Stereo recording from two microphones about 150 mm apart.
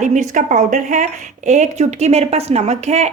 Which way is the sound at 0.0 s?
55° right (ahead or behind).